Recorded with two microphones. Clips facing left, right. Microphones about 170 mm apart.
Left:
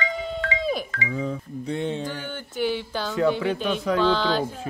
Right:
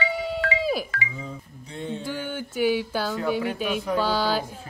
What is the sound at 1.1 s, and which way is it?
Speech, 70° left (ahead or behind).